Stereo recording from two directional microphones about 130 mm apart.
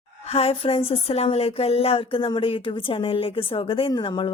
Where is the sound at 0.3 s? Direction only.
50° left (ahead or behind).